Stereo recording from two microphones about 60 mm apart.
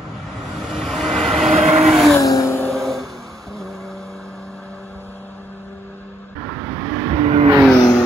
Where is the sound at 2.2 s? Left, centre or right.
Left.